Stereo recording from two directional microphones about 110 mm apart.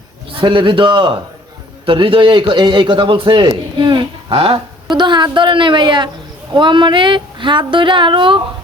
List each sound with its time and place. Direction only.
0.3 s a man's voice: 50° right (ahead or behind)